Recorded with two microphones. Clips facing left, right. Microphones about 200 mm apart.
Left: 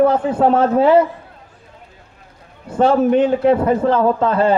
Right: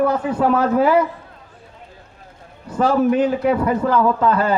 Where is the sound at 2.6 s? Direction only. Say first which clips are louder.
Left 2 dB; 25° left (ahead or behind).